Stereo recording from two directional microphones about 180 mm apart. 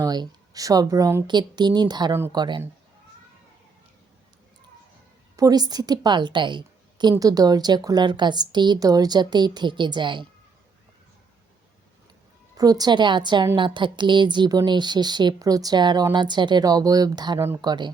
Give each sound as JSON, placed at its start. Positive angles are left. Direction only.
{"t": 0.0, "sound": "a woman's voice", "side_deg": -20}
{"t": 5.4, "sound": "a woman's voice", "side_deg": -20}
{"t": 12.5, "sound": "a woman's voice", "side_deg": -20}